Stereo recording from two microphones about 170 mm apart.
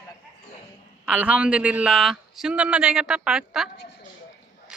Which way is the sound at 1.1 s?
5° right (ahead or behind).